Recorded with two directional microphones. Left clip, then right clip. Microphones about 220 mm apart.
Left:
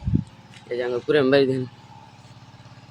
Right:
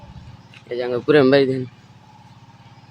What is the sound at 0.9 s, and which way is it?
Speech, 40° right (ahead or behind).